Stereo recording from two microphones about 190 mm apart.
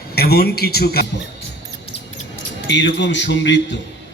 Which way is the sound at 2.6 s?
70° left (ahead or behind).